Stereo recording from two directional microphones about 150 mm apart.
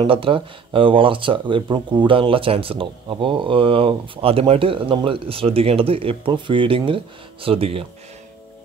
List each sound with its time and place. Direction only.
0.0 s speech: 35° right (ahead or behind)